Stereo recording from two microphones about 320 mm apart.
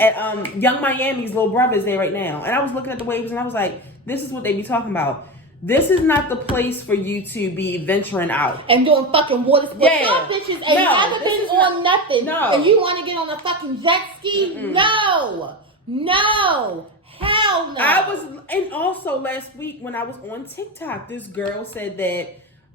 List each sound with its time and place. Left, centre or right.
0.0 s a woman's voice: centre
8.5 s a child's voice: centre
9.8 s a woman's voice: centre
10.1 s a child's voice: centre
17.2 s a sound: centre
17.7 s a woman's voice: centre